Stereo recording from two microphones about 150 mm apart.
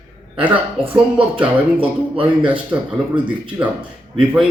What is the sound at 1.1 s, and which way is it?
Speech, 10° right (ahead or behind).